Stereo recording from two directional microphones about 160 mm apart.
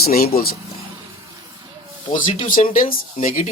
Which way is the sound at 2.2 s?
60° left (ahead or behind).